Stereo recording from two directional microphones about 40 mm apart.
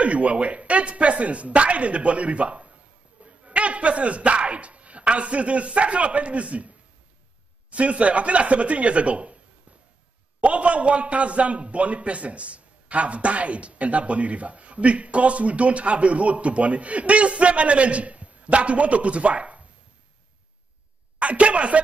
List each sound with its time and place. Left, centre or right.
0.0 s speech: right
7.7 s a man's voice: right
10.4 s a man's voice: right
21.2 s a man's voice: right